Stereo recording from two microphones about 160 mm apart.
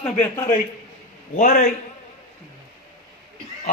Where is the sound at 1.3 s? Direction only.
65° left (ahead or behind).